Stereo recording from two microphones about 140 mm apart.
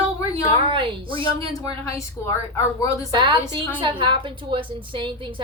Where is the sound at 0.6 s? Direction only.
40° right (ahead or behind).